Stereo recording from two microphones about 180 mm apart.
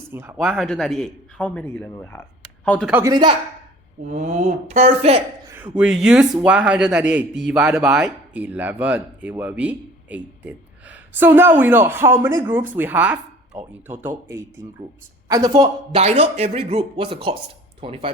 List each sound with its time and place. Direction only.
0.1 s a man's voice: 10° right (ahead or behind); by 2.9 s 5° left (ahead or behind)
2.9 s a man's voice: 20° right (ahead or behind)
4.0 s speech: 40° right (ahead or behind)
5.7 s a man's voice: 5° right (ahead or behind); by 15.7 s 20° right (ahead or behind)
15.9 s speech: 35° right (ahead or behind)